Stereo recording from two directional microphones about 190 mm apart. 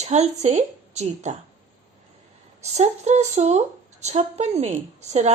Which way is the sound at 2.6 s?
35° right (ahead or behind).